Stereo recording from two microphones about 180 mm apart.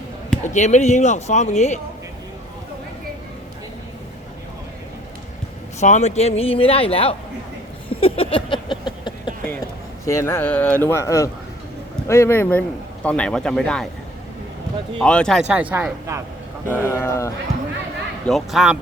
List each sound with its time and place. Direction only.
0.4 s speech: 40° left (ahead or behind)
5.8 s speech: 40° left (ahead or behind)
7.9 s a sound: 30° left (ahead or behind)
10.1 s speech: 15° left (ahead or behind)
14.9 s a man's voice: 5° left (ahead or behind); by 16.2 s 10° right (ahead or behind)
16.6 s speech: 15° left (ahead or behind)
18.3 s a man's voice: centre (ahead or behind)